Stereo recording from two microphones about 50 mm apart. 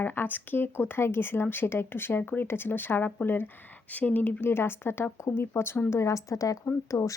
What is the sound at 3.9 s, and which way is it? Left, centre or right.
Speech, left.